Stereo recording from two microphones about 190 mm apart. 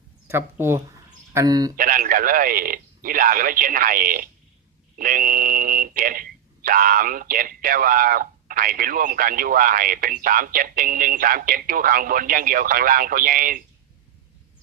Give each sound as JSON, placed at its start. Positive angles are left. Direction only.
{"t": 0.3, "sound": "speech", "side_deg": -10}
{"t": 1.7, "sound": "speech", "side_deg": -50}